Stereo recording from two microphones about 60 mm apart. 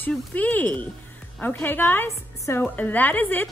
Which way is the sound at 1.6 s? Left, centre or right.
Left.